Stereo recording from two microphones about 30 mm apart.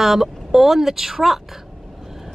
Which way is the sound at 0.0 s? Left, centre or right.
Centre.